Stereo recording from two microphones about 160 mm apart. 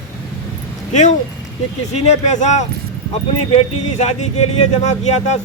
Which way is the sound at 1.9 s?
45° left (ahead or behind).